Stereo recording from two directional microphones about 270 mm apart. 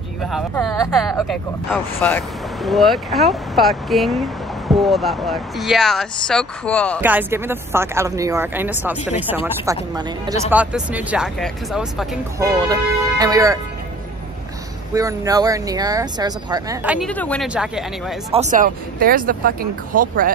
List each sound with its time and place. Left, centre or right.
0.2 s speech: centre
7.0 s speech: centre
12.4 s speech: centre
15.0 s speech: centre
17.1 s speech: centre
18.3 s speech: right